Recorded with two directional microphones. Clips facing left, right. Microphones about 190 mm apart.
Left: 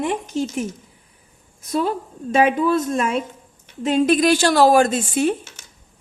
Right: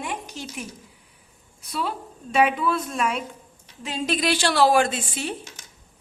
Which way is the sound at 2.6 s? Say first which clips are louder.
Left 6 dB; 45° left (ahead or behind).